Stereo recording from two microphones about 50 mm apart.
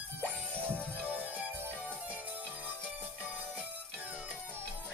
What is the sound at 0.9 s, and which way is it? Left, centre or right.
Music, right.